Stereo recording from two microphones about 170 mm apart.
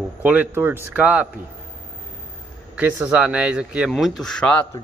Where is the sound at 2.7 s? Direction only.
5° right (ahead or behind).